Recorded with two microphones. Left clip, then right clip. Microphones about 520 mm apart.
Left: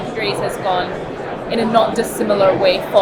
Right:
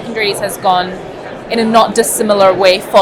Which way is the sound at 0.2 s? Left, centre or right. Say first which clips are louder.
Right 5 dB; right.